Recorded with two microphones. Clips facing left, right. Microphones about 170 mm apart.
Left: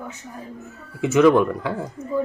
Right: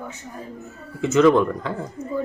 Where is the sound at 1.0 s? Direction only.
10° left (ahead or behind).